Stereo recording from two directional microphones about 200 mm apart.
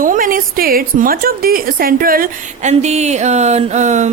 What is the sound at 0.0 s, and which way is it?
A woman's voice, 45° right (ahead or behind).